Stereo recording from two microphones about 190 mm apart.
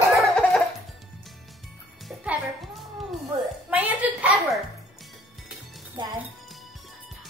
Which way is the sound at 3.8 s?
5° right (ahead or behind).